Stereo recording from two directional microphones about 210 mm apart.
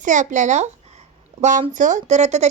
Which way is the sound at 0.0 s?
35° right (ahead or behind).